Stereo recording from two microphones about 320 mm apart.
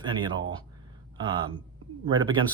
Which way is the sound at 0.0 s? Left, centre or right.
Centre.